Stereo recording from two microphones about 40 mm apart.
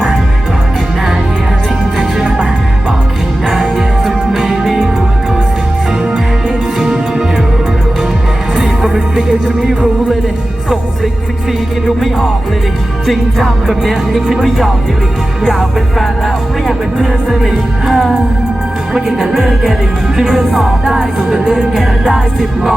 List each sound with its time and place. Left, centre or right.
2.0 s music: right
8.5 s music: centre
11.9 s music: centre
13.8 s speech: centre
16.0 s music: centre
17.0 s music: centre